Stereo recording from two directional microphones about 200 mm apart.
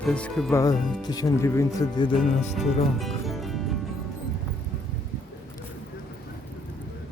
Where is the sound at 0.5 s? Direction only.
15° left (ahead or behind).